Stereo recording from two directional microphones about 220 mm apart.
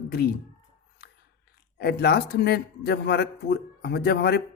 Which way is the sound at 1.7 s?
45° left (ahead or behind).